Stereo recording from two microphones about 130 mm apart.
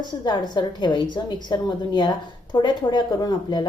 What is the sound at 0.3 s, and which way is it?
A woman's voice, 35° left (ahead or behind).